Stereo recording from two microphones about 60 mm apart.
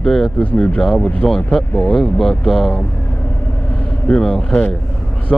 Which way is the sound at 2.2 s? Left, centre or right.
Centre.